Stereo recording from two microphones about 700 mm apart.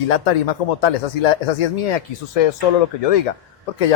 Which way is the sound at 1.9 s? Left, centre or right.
Left.